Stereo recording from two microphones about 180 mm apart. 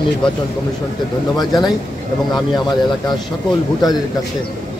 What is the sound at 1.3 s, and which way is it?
A man's voice, 25° left (ahead or behind).